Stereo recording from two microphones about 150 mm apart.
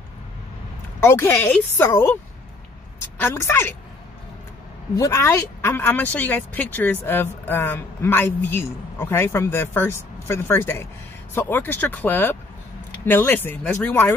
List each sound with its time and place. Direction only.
1.0 s speech: 15° left (ahead or behind)
3.2 s speech: 15° left (ahead or behind)
4.9 s speech: 20° left (ahead or behind)